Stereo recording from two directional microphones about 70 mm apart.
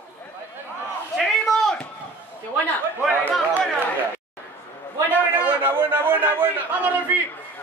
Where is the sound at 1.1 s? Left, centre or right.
Centre.